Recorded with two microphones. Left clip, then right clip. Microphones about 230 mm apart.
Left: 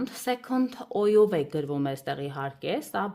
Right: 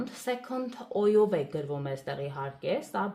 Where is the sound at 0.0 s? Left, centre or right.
Left.